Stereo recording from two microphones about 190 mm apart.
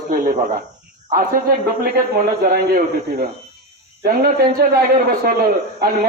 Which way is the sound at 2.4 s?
50° right (ahead or behind).